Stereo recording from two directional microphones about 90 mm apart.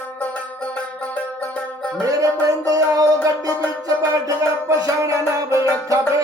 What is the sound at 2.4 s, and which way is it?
Music, 40° right (ahead or behind).